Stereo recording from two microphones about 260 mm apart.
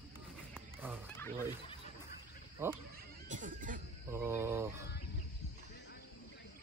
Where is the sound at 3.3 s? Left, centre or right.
Right.